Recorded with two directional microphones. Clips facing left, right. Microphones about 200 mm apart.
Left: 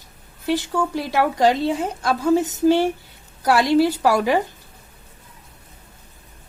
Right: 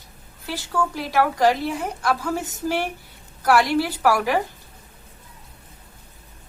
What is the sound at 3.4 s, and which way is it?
Speech, 20° left (ahead or behind).